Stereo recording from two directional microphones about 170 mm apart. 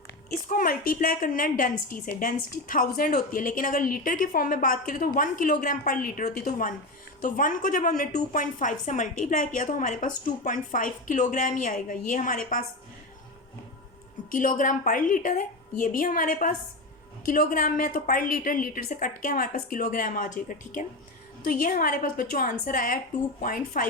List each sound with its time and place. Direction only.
0.4 s a woman's voice: 55° left (ahead or behind)
14.3 s a woman's voice: 50° left (ahead or behind)